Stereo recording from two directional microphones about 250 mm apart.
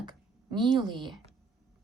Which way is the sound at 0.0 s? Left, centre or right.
Centre.